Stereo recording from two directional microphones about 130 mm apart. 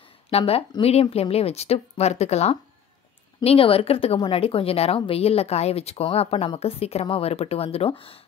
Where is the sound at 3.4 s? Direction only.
45° left (ahead or behind).